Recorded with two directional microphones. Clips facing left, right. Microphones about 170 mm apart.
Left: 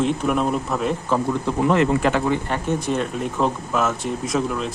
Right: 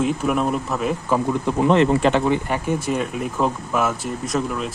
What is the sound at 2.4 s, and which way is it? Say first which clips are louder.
Speech: even; 10° right (ahead or behind).